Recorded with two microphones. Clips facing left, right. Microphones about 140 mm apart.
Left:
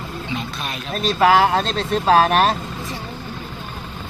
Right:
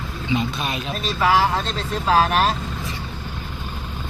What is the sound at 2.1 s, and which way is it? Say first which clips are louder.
Speech: left 3 dB; 45° left (ahead or behind).